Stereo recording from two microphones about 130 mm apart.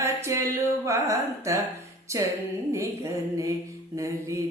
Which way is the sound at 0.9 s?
25° right (ahead or behind).